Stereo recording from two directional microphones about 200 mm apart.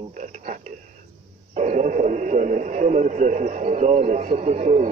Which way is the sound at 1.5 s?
35° right (ahead or behind).